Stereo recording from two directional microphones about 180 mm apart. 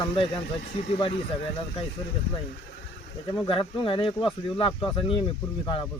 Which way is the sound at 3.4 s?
30° left (ahead or behind).